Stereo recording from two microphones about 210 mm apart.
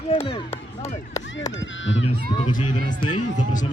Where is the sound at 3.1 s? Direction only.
35° left (ahead or behind).